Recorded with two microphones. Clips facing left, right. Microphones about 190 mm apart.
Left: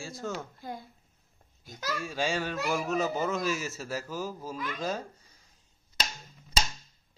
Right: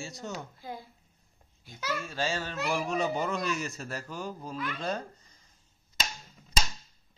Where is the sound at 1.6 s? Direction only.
40° left (ahead or behind).